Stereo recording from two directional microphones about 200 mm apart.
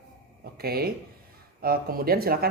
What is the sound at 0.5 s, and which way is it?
Speech, 50° right (ahead or behind).